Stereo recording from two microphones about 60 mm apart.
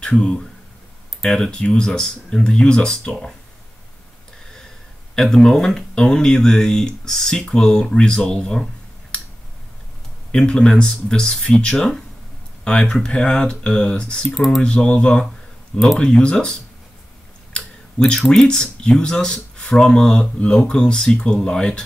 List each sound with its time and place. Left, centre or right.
0.0 s speech: centre
5.1 s speech: centre
10.3 s speech: centre
12.9 s speech: centre
14.3 s speech: centre
14.6 s speech: centre